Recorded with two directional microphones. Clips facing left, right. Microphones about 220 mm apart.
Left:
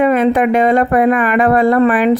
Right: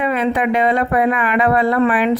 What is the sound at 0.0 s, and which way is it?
Speech, 50° left (ahead or behind).